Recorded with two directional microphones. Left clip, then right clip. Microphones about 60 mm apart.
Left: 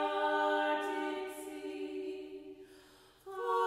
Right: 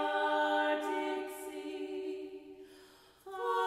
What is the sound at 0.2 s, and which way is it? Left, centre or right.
Music, right.